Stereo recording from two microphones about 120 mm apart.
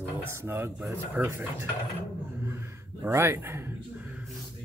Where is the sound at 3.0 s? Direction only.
20° right (ahead or behind).